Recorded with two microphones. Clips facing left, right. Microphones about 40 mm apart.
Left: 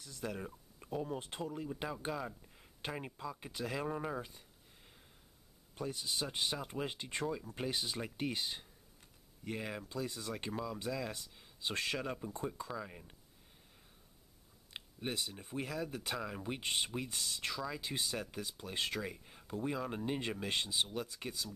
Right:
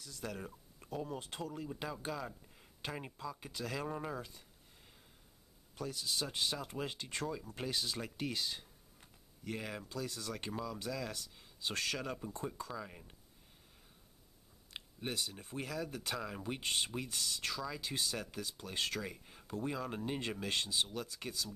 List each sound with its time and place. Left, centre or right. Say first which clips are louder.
0.2 s speech: left 2 dB; centre
1.0 s speech: left 2 dB; left
2.2 s a sound: left 1 dB; centre
3.2 s speech: left 1 dB; centre
3.8 s speech: left 2 dB; centre
4.1 s speech: left 2 dB; centre
5.8 s speech: even; left
9.4 s speech: left 1 dB; centre
12.8 s speech: left 1 dB; centre
14.7 s speech: left 1 dB; centre
16.6 s speech: even; centre
19.0 s speech: left 1 dB; centre